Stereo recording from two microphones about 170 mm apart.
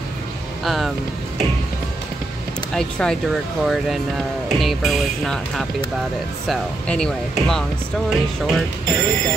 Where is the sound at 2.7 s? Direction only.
5° left (ahead or behind).